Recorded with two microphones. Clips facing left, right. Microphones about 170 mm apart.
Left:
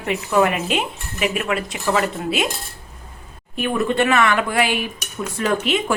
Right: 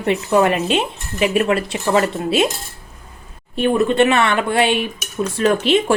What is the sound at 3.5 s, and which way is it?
Speech, 30° right (ahead or behind).